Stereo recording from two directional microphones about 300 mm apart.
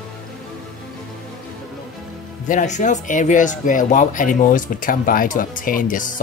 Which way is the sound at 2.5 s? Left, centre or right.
Left.